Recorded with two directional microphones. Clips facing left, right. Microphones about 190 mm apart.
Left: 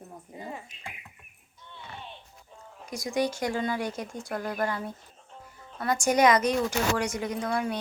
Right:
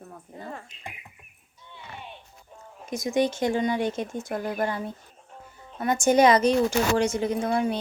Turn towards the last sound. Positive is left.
turn(degrees=-25)  # may be behind; listen again after turning